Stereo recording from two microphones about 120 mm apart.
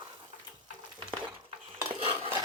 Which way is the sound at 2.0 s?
50° right (ahead or behind).